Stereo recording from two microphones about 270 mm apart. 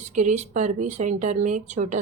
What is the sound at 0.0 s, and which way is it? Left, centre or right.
Speech, right.